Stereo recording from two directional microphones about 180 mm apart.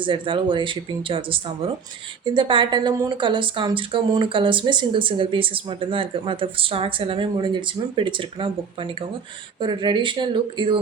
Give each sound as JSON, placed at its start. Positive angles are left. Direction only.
{"t": 0.0, "sound": "speech", "side_deg": -25}